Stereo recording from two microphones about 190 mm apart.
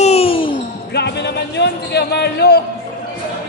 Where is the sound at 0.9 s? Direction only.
60° left (ahead or behind).